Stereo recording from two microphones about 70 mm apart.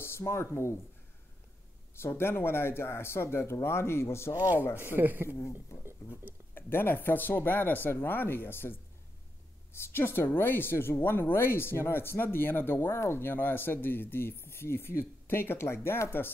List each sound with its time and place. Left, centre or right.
0.0 s speech: left
2.0 s speech: left
4.4 s speech: right
6.5 s speech: left
9.8 s speech: left